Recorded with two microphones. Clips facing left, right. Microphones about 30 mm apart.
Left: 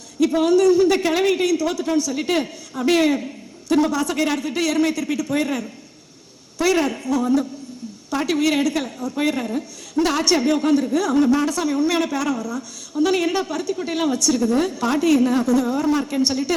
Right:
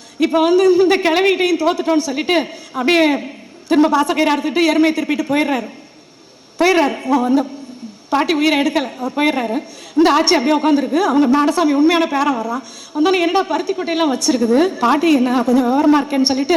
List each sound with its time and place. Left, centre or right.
0.2 s a woman's voice: right